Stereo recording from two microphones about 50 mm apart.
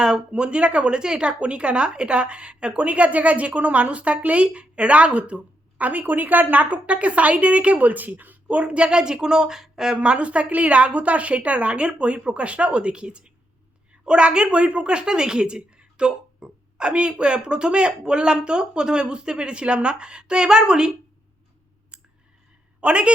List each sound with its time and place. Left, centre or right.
0.0 s a woman's voice: centre
21.9 s clicking: centre
22.8 s a woman's voice: right